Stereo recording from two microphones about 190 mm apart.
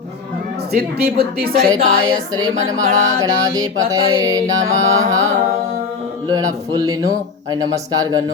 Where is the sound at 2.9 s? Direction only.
35° right (ahead or behind).